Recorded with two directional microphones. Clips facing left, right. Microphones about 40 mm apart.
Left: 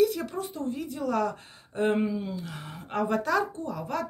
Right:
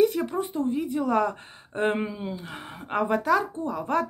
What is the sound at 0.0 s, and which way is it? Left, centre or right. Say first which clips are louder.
Speech: right 3 dB; right.